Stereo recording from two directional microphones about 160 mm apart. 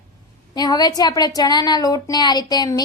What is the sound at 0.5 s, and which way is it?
A woman's voice, 25° left (ahead or behind).